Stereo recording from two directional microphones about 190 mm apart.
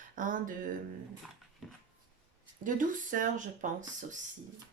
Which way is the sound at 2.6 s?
45° right (ahead or behind).